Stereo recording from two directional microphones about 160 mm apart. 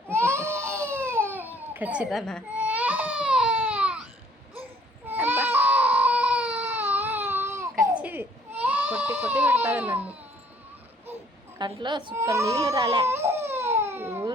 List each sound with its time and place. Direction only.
0.1 s baby cry: 15° right (ahead or behind); by 2.4 s centre (ahead or behind)
2.6 s baby cry: 10° right (ahead or behind)
5.0 s baby cry: 10° right (ahead or behind)
11.0 s a sound: 15° right (ahead or behind)
11.6 s speech: 30° right (ahead or behind)
12.1 s speech: 20° right (ahead or behind)
13.0 s baby cry: 15° right (ahead or behind)